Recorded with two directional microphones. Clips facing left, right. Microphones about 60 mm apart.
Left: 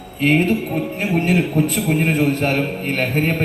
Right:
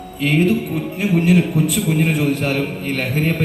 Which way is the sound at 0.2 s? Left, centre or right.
Left.